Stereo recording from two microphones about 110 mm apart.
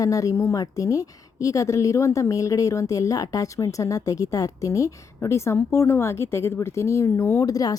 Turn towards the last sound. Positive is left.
turn(degrees=35)  # may be behind; listen again after turning